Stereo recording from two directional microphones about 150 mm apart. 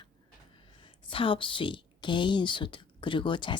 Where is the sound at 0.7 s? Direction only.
35° left (ahead or behind).